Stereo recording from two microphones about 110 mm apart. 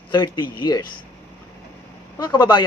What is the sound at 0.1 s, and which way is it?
Speech, 40° left (ahead or behind).